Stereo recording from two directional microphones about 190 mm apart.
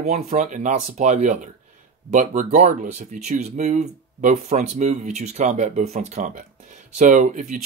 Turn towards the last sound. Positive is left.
turn(degrees=-45)  # may be behind; listen again after turning